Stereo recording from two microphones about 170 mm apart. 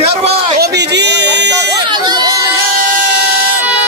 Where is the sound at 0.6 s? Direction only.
80° right.